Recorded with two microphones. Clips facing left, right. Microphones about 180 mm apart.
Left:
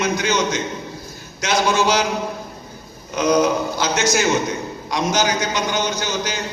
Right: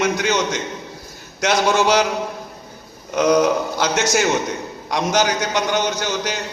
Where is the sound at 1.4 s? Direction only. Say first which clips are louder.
Right 1 dB; 65° right (ahead or behind).